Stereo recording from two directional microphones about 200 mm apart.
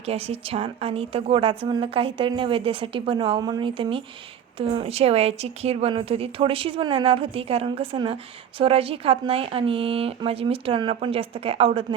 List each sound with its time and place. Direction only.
0.0 s speech: 30° right (ahead or behind)